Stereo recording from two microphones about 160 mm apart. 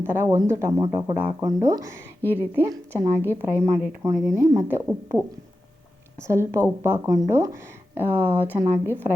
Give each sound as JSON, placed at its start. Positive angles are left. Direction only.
{"t": 0.0, "sound": "speech", "side_deg": -15}
{"t": 1.1, "sound": "speech", "side_deg": -10}
{"t": 1.5, "sound": "speech", "side_deg": -25}
{"t": 6.1, "sound": "speech", "side_deg": -15}